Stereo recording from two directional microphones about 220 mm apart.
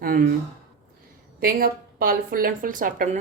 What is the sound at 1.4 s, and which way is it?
A woman's voice, 40° right (ahead or behind).